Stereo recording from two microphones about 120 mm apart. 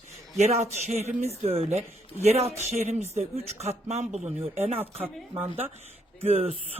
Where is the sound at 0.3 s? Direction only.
70° right (ahead or behind).